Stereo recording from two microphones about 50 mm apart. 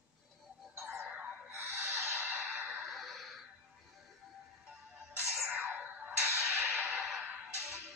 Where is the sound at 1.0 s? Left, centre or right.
Right.